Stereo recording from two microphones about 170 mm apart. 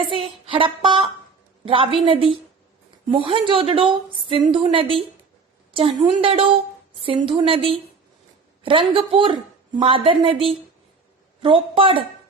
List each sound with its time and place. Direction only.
0.0 s a woman's voice: 30° right (ahead or behind)
11.4 s a woman's voice: 30° right (ahead or behind)